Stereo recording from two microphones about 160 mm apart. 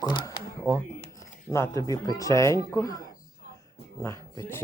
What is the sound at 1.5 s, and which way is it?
Speech, 20° left (ahead or behind).